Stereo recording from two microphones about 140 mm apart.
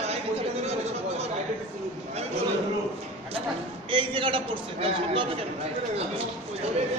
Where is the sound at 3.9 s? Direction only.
35° right (ahead or behind).